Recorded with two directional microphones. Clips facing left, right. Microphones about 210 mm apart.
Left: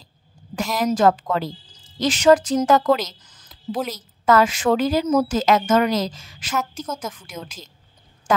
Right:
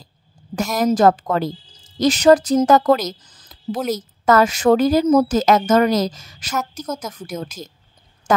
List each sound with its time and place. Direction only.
0.6 s a woman's voice: 45° right (ahead or behind)